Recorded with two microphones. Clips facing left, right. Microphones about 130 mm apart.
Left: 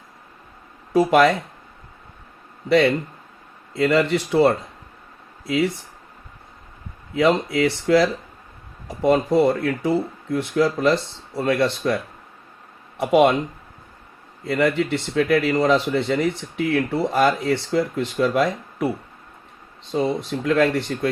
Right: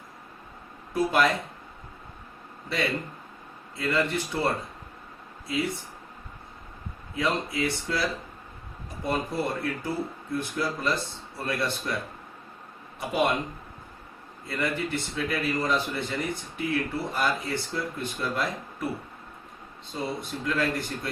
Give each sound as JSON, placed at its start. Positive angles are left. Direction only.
{"t": 0.9, "sound": "speech", "side_deg": 80}
{"t": 2.6, "sound": "speech", "side_deg": 80}
{"t": 7.2, "sound": "speech", "side_deg": 75}
{"t": 13.0, "sound": "speech", "side_deg": 85}
{"t": 14.4, "sound": "speech", "side_deg": 80}
{"t": 19.9, "sound": "speech", "side_deg": 90}